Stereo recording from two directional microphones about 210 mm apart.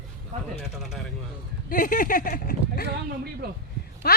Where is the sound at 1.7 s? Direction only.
40° left (ahead or behind).